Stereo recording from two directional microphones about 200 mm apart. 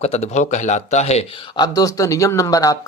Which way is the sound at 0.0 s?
30° left (ahead or behind).